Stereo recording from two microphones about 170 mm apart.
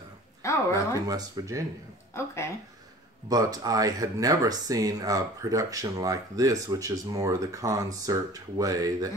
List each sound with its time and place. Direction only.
0.4 s a sound: 15° left (ahead or behind)
0.9 s speech: 20° right (ahead or behind)
2.1 s speech: 15° left (ahead or behind)
3.3 s speech: 20° right (ahead or behind)